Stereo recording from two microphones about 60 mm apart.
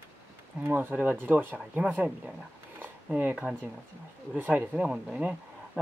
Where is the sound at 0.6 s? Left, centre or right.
Right.